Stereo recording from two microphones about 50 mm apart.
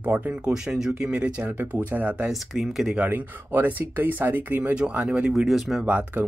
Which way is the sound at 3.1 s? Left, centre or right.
Right.